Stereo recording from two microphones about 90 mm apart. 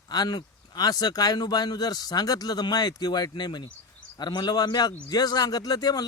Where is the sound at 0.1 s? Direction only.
50° left (ahead or behind).